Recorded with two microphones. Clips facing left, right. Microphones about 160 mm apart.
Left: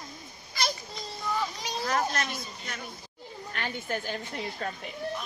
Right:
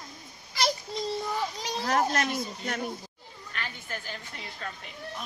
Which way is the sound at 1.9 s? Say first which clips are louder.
Right 4 dB; 55° right (ahead or behind).